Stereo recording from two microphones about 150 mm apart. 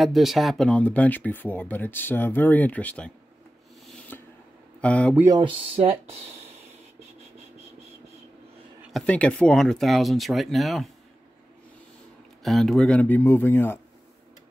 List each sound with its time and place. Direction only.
0.0 s speech: centre (ahead or behind)
4.1 s a sound: 10° left (ahead or behind)
4.8 s speech: 10° left (ahead or behind)
5.2 s speech: 25° right (ahead or behind)
5.8 s speech: 40° right (ahead or behind)
9.0 s speech: 10° left (ahead or behind)
12.4 s speech: centre (ahead or behind)